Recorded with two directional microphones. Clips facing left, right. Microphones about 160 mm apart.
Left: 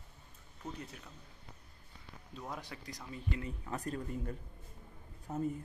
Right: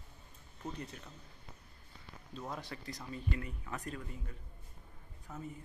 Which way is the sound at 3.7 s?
35° left (ahead or behind).